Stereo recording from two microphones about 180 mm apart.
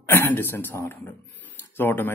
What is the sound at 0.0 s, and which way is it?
A man's voice, 10° left (ahead or behind).